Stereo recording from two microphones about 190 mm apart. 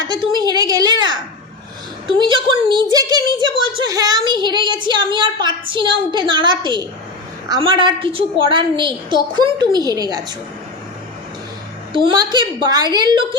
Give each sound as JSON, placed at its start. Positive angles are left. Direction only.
{"t": 0.3, "sound": "a woman's voice", "side_deg": -20}
{"t": 11.9, "sound": "a woman's voice", "side_deg": -25}